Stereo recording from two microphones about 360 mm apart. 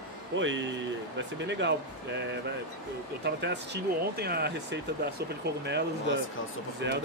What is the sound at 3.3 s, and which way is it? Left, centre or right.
Speech, right.